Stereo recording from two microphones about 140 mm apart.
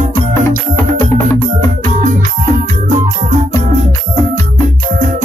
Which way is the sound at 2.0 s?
65° right (ahead or behind).